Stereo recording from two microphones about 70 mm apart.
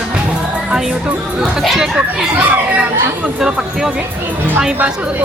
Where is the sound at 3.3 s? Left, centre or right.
Centre.